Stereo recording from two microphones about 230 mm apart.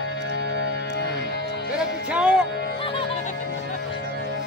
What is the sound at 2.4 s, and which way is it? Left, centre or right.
Music, left.